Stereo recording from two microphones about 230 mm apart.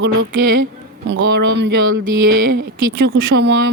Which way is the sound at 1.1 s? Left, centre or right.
Right.